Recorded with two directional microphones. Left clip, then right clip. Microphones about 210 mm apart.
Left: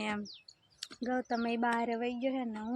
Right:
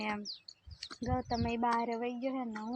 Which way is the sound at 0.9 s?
15° left (ahead or behind).